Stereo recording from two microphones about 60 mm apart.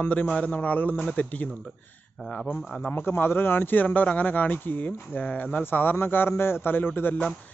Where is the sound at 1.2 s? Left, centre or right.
Left.